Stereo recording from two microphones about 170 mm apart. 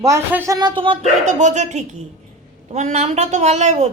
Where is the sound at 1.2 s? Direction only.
45° right (ahead or behind).